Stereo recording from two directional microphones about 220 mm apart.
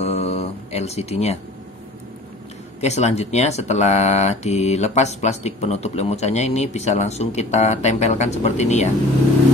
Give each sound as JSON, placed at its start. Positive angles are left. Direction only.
{"t": 0.0, "sound": "music", "side_deg": 30}
{"t": 2.8, "sound": "speech", "side_deg": 30}